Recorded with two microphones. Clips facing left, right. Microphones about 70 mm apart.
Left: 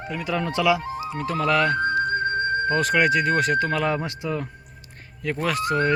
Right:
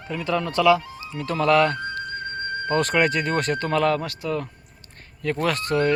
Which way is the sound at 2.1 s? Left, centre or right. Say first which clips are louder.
Left 7 dB; left.